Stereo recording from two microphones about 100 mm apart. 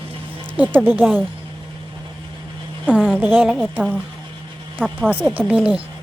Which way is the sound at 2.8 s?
10° right (ahead or behind).